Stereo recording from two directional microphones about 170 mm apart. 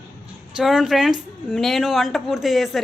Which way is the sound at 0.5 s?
Centre (ahead or behind).